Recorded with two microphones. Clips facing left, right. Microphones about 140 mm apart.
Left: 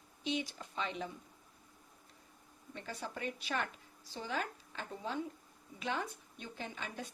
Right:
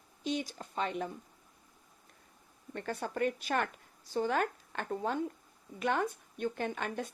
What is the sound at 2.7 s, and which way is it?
Speech, 55° right (ahead or behind).